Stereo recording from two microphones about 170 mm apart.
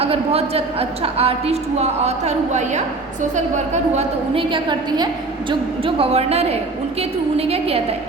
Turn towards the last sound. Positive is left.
turn(degrees=-35)  # may be behind; listen again after turning